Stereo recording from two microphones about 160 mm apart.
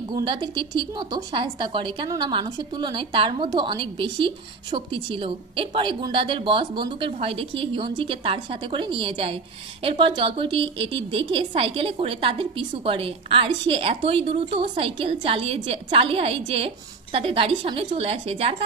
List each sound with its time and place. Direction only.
0.1 s a woman's voice: 30° right (ahead or behind)